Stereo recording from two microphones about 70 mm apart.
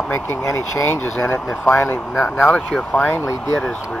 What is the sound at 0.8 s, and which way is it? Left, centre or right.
Speech, left.